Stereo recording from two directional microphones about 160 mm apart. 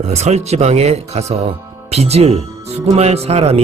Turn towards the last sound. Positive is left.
turn(degrees=-40)  # may be behind; listen again after turning